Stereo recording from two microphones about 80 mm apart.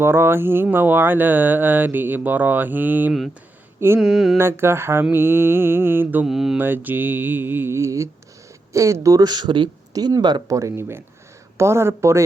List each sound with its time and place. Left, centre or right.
0.0 s speech: right
3.8 s mantra: right
4.0 s mantra: centre
4.4 s mantra: right
5.1 s speech: right
6.2 s mantra: centre
6.6 s speech: right
8.7 s mantra: right
9.2 s speech: right
9.9 s speech: right
10.5 s mantra: right